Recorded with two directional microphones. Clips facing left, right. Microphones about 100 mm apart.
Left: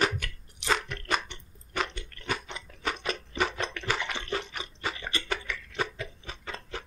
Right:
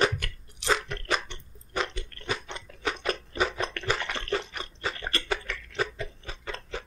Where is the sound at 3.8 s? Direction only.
5° left (ahead or behind).